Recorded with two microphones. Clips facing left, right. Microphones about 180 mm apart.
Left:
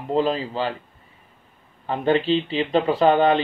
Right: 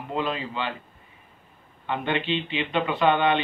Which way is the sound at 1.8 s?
35° left (ahead or behind).